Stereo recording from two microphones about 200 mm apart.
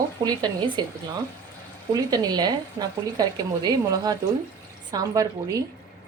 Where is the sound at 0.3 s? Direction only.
20° right (ahead or behind).